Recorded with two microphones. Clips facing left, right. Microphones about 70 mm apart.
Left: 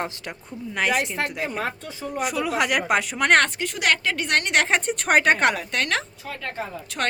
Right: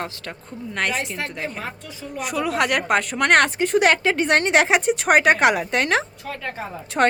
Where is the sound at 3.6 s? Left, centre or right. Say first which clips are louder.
Right 6 dB; right.